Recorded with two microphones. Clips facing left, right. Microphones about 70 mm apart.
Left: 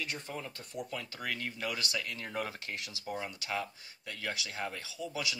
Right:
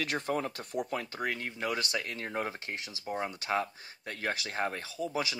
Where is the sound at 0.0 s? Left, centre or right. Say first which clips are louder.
Right 8 dB; right.